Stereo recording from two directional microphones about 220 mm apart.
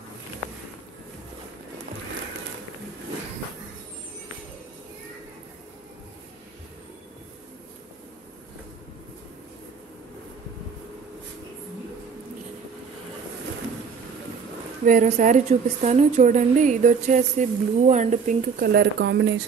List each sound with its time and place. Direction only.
14.9 s a woman's voice: 35° right (ahead or behind); by 19.4 s 55° right (ahead or behind)